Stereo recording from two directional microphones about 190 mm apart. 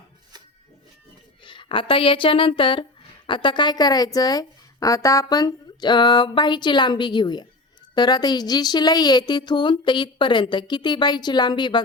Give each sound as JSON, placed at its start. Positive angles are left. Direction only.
{"t": 1.5, "sound": "a woman's voice", "side_deg": 25}